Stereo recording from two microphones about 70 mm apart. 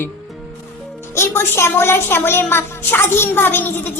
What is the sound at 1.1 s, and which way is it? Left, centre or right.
A woman's voice, left.